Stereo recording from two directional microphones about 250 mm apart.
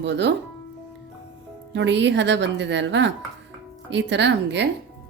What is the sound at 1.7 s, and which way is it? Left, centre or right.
A woman's voice, right.